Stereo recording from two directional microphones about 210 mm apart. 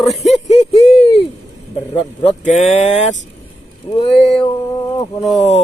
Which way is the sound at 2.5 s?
35° left (ahead or behind).